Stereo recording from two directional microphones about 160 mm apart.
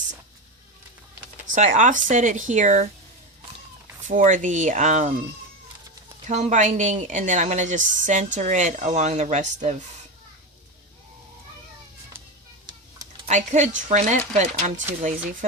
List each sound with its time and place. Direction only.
1.5 s speech: 50° right (ahead or behind)
4.0 s speech: 55° right (ahead or behind)
6.2 s speech: 50° right (ahead or behind)
13.2 s speech: 50° right (ahead or behind)